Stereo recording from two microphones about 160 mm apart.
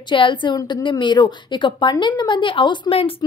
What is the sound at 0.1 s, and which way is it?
A woman's voice, 30° left (ahead or behind).